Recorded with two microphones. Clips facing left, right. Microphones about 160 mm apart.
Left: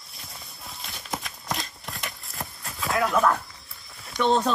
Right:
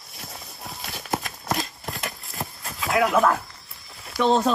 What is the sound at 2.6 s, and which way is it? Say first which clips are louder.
Speech: right 3 dB; centre (ahead or behind).